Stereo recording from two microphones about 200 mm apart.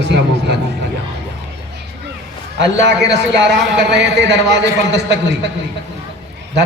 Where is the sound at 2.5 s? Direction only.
60° right (ahead or behind).